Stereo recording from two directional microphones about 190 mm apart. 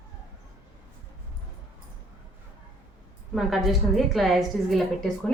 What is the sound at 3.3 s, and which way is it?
A woman's voice, centre (ahead or behind).